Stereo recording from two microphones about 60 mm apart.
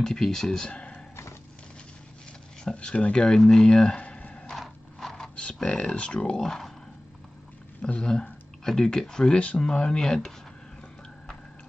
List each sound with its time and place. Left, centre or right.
0.0 s speech: centre
0.7 s a sound: centre
2.6 s speech: centre
4.6 s horse: centre
5.3 s a sound: centre
5.6 s speech: centre
7.8 s speech: centre